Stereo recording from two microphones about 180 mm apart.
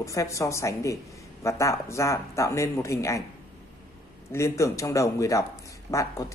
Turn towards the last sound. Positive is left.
turn(degrees=15)  # may be behind; listen again after turning